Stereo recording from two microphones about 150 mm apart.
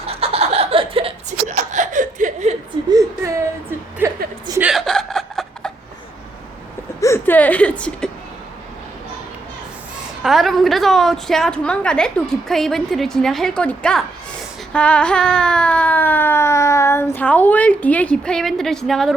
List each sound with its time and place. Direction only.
0.0 s laughter: 40° right (ahead or behind)
1.5 s chuckle: 55° right (ahead or behind)
2.9 s whimper: 20° right (ahead or behind)
4.0 s a sound: 15° right (ahead or behind)
4.6 s chuckle: centre (ahead or behind)
7.0 s whimper: 15° left (ahead or behind)
10.2 s a woman's voice: centre (ahead or behind)
14.7 s baby cry: 10° left (ahead or behind)